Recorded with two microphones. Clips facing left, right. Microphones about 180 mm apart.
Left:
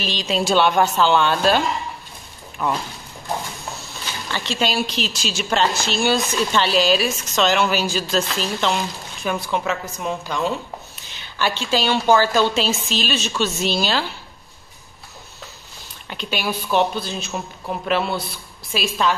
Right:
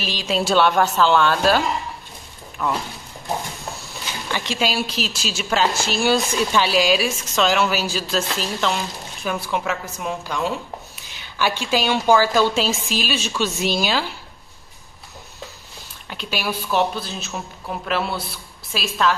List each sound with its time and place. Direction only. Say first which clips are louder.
0.0 s a woman's voice: left 1 dB; 5° right (ahead or behind)
2.6 s speech: left 1 dB; 15° left (ahead or behind)
4.3 s a woman's voice: even; 15° right (ahead or behind)
16.1 s a woman's voice: left 1 dB; 5° right (ahead or behind)